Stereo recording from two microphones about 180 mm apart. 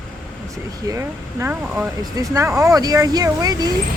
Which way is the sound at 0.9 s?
15° right (ahead or behind).